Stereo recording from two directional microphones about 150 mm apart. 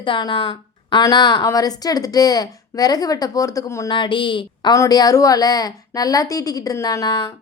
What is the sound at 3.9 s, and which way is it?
A woman's voice, 35° left (ahead or behind).